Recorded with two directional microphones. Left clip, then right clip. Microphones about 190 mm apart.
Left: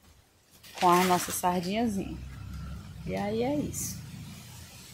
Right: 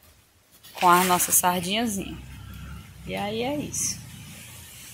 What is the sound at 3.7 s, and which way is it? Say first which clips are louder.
Speech: right 9 dB; 35° left (ahead or behind).